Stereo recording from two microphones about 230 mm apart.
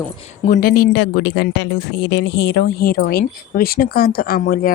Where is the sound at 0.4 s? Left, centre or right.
Left.